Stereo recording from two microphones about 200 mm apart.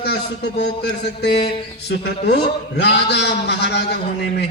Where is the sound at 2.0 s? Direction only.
55° left (ahead or behind).